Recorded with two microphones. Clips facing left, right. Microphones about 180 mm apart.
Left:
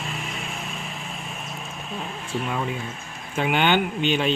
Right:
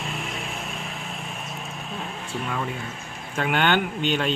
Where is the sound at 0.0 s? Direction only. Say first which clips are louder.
Right 1 dB; centre (ahead or behind).